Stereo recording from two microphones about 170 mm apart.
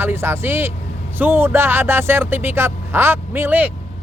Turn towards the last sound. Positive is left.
turn(degrees=-10)  # may be behind; listen again after turning